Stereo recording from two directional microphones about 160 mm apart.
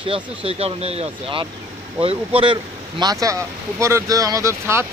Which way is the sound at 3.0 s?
20° right (ahead or behind).